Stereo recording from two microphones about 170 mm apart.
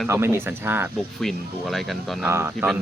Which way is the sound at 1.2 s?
Centre (ahead or behind).